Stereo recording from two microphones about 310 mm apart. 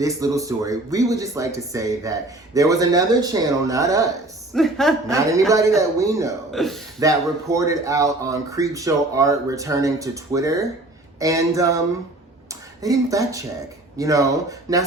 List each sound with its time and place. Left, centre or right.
0.0 s speech: centre
4.5 s a man's voice: centre
5.0 s speech: centre
6.5 s a man's voice: centre
7.0 s speech: centre
12.8 s speech: centre